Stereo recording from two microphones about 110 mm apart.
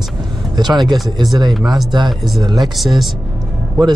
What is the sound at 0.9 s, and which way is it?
Speech, centre (ahead or behind).